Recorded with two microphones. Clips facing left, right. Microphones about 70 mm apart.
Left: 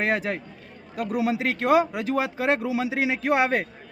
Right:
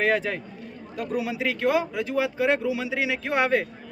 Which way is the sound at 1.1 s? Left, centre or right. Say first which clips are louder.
Left 2 dB; left.